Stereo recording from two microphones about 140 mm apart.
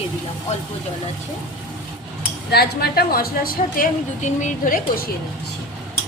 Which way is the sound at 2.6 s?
90° left.